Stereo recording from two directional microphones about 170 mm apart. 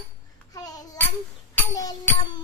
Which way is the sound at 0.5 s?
20° left (ahead or behind).